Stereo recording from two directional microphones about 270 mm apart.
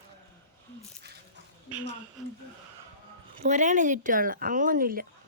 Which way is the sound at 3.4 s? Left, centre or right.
Right.